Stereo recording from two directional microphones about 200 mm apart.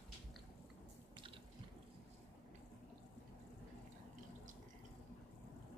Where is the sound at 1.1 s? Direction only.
25° right (ahead or behind).